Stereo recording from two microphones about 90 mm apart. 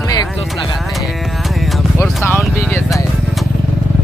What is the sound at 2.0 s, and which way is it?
Speech, 30° left (ahead or behind).